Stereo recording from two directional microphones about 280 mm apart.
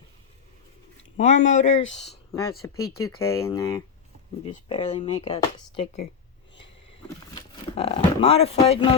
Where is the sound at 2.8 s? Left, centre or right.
Left.